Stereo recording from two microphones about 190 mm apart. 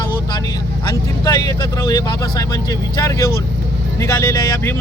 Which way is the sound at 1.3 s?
20° left (ahead or behind).